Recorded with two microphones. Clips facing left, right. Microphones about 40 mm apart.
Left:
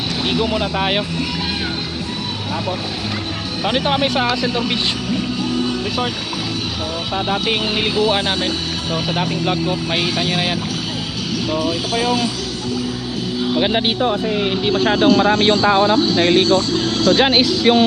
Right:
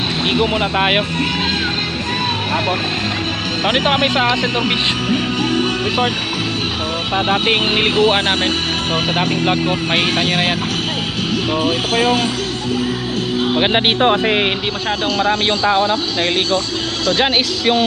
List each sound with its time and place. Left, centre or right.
0.3 s speech: right
3.7 s speech: right
4.6 s music: right
7.3 s speech: right
11.5 s speech: right
13.4 s speech: right
14.0 s speech: right
15.1 s speech: right
17.1 s speech: right